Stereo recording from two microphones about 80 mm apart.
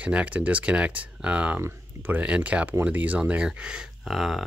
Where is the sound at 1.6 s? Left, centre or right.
Right; by 4.4 s centre.